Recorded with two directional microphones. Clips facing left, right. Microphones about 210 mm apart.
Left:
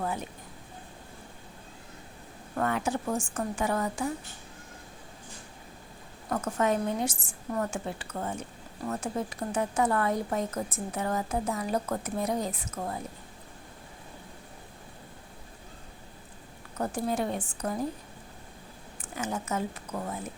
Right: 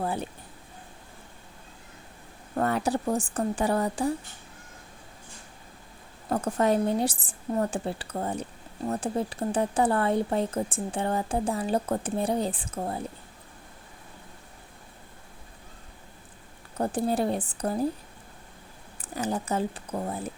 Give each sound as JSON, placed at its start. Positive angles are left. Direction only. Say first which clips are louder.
{"t": 0.0, "sound": "a sound", "louder": "right 3 dB", "side_deg": -30}
{"t": 2.6, "sound": "a woman's voice", "louder": "right 3 dB", "side_deg": -35}
{"t": 6.2, "sound": "a woman's voice", "louder": "right 3 dB", "side_deg": -35}
{"t": 16.7, "sound": "a woman's voice", "louder": "right 4 dB", "side_deg": -30}
{"t": 19.0, "sound": "a woman's voice", "louder": "right 4 dB", "side_deg": -35}